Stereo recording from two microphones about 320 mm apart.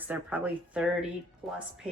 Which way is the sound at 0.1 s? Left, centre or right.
Centre.